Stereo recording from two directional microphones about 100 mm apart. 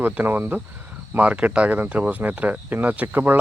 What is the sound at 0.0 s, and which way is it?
Speech, 15° right (ahead or behind).